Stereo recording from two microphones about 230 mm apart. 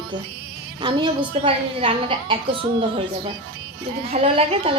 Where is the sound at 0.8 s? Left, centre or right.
Centre.